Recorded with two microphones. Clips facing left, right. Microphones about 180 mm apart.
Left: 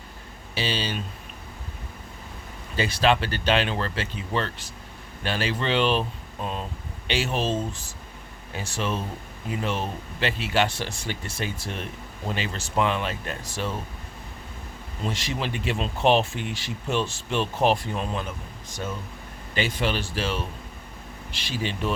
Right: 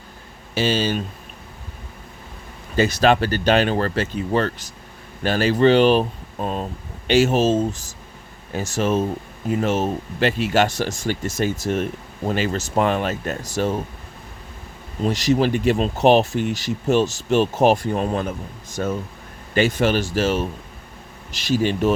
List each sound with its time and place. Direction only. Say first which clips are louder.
0.5 s speech: right 8 dB; 45° right (ahead or behind)
2.7 s speech: right 6 dB; 45° right (ahead or behind)
15.0 s speech: right 11 dB; 40° right (ahead or behind)